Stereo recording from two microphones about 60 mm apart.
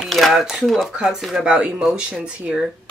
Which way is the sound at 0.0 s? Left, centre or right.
Centre.